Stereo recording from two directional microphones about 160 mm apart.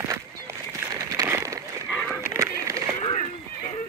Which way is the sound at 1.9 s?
5° left (ahead or behind).